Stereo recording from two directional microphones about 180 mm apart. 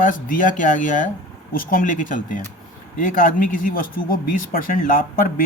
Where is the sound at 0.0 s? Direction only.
45° left (ahead or behind).